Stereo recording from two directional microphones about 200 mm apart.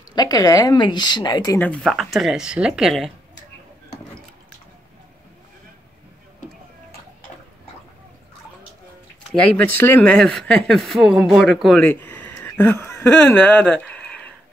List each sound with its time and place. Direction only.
0.1 s speech: 20° left (ahead or behind)
1.7 s speech: centre (ahead or behind)
9.3 s speech: 10° left (ahead or behind)